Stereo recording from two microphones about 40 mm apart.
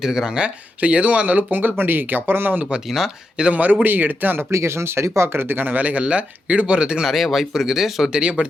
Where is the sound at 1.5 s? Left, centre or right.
Right.